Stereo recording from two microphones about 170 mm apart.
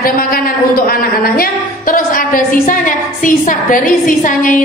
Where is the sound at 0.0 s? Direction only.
60° left (ahead or behind).